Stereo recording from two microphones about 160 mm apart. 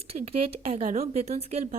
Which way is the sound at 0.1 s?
40° right (ahead or behind).